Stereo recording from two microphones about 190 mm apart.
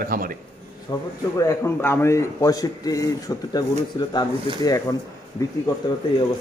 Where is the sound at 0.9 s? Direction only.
20° left (ahead or behind).